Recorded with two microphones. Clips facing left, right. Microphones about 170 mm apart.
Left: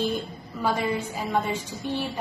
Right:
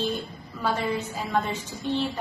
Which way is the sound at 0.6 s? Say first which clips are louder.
Left 1 dB; 10° left (ahead or behind).